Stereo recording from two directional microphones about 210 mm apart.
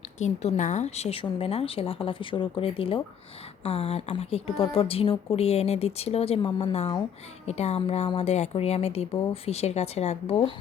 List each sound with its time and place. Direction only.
0.2 s a woman's voice: 35° left (ahead or behind)